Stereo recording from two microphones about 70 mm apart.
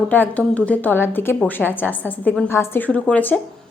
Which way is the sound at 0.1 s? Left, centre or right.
Left.